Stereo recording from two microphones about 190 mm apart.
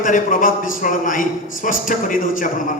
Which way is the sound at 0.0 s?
45° left (ahead or behind).